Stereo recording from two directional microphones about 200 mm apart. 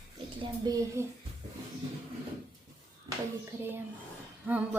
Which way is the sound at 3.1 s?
15° right (ahead or behind).